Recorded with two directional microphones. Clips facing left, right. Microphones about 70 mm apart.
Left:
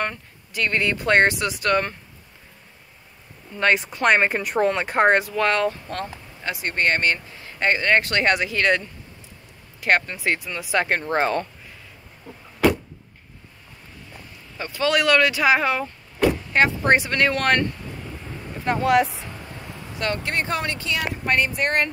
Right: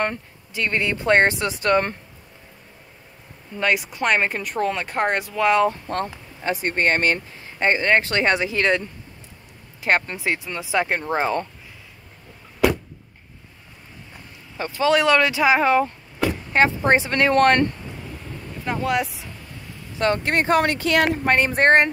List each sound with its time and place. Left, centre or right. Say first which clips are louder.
0.0 s speech: right 3 dB; right
3.5 s speech: left 1 dB; centre
4.1 s speech: left 3 dB; centre
5.7 s speech: right 3 dB; right
7.6 s speech: right 1 dB; right
9.8 s speech: even; right
14.6 s speech: right 3 dB; right
18.7 s speech: left 4 dB; centre
20.0 s speech: right 5 dB; right